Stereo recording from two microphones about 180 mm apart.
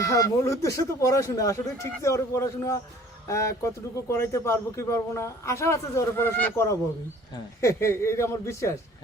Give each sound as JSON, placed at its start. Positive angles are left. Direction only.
{"t": 0.0, "sound": "speech", "side_deg": 15}